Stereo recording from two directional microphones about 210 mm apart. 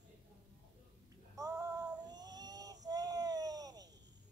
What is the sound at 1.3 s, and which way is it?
Child singing, 15° right (ahead or behind).